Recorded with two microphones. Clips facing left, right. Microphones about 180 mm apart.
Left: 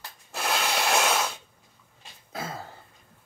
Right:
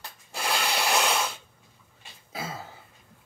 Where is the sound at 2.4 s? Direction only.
5° right (ahead or behind).